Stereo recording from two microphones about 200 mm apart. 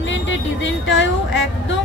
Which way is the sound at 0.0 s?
70° left (ahead or behind).